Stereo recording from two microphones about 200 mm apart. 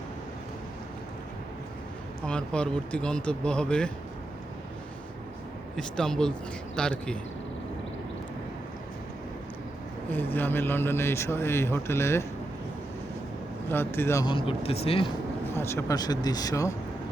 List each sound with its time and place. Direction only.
2.2 s speech: 5° left (ahead or behind)
5.7 s speech: 5° left (ahead or behind)
10.1 s speech: 10° left (ahead or behind)
13.7 s speech: 10° left (ahead or behind); by 15.1 s 30° left (ahead or behind)
15.5 s speech: 15° left (ahead or behind)